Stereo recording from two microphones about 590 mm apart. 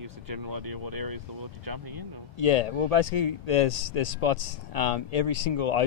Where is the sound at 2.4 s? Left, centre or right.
Left.